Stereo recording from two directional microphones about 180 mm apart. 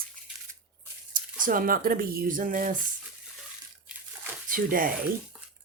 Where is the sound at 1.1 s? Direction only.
50° right (ahead or behind).